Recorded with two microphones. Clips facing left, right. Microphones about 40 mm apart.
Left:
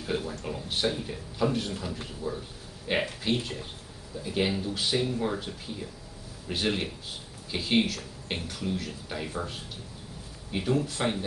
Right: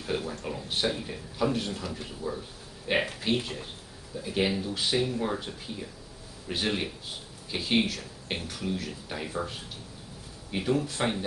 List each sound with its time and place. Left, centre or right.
0.2 s speech: centre
2.9 s speech: centre